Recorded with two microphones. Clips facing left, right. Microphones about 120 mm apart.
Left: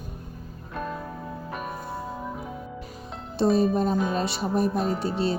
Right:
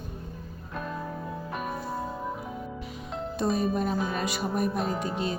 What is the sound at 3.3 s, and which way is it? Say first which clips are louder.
Speech: left 6 dB; 30° left (ahead or behind).